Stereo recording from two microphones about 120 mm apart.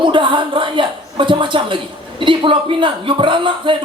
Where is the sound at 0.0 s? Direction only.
45° right (ahead or behind).